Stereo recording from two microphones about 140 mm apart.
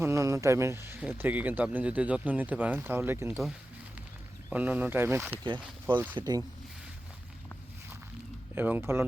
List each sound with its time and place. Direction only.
0.0 s speech: 20° right (ahead or behind)
4.4 s speech: 10° right (ahead or behind)
6.1 s speech: 30° right (ahead or behind)
8.5 s speech: 15° right (ahead or behind)